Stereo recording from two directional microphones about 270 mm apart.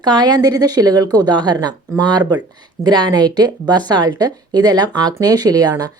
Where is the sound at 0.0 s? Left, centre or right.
Centre.